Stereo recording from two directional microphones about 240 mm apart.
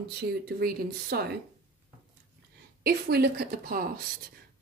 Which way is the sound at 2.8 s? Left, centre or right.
Right.